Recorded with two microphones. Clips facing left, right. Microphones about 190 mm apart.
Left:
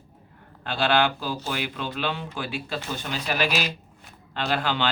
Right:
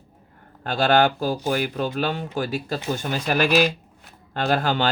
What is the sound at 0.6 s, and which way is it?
Speech, 45° right (ahead or behind).